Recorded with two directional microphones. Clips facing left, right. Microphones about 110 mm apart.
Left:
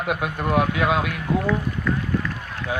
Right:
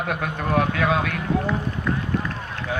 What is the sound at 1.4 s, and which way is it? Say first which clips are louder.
Run: left 2 dB; 20° right (ahead or behind).